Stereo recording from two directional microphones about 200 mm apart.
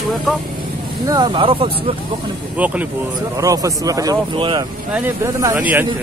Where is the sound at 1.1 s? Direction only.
20° right (ahead or behind).